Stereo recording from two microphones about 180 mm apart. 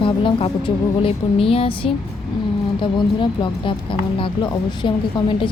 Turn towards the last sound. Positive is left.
turn(degrees=25)  # may be behind; listen again after turning